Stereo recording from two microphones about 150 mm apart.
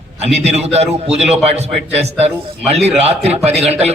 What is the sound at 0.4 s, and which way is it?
A man's voice, 45° right (ahead or behind).